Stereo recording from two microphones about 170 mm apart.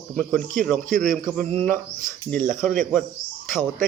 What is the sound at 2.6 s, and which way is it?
Speech, centre (ahead or behind).